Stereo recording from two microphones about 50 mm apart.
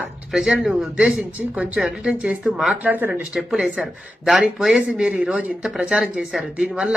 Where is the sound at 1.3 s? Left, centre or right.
Right.